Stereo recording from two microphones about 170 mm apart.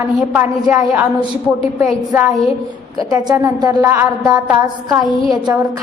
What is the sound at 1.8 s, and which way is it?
Speech, 5° right (ahead or behind).